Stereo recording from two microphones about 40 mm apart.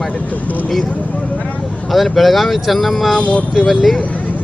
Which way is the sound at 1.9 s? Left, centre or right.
Centre.